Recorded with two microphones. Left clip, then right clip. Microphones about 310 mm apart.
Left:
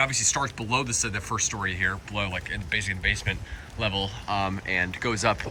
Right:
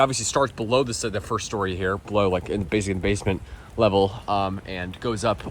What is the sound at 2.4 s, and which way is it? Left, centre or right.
Speech, centre.